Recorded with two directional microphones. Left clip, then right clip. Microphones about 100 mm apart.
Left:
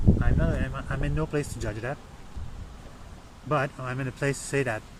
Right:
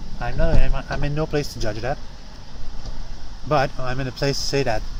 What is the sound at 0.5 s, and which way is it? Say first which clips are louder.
Speech: right 6 dB; 15° left (ahead or behind).